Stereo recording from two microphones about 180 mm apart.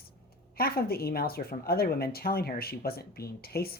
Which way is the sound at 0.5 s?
60° left (ahead or behind).